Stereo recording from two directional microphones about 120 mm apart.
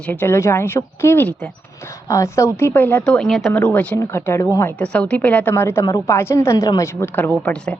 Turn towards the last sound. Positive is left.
turn(degrees=10)  # may be behind; listen again after turning